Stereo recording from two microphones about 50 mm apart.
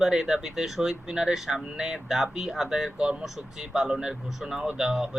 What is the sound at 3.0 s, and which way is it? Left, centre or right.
Speech, right.